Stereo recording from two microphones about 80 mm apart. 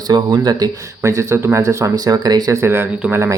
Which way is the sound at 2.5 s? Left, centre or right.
Right.